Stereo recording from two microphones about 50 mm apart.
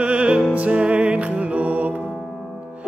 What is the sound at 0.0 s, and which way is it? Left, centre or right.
Music, right.